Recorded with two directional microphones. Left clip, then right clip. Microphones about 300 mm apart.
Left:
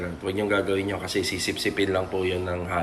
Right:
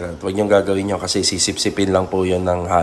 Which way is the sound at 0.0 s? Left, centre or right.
Centre.